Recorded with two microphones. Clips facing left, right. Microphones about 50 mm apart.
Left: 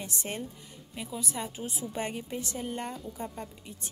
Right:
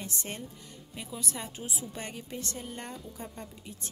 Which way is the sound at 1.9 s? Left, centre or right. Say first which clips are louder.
Left 5 dB; centre.